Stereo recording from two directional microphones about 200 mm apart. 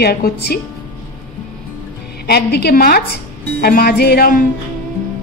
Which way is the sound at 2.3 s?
55° left (ahead or behind).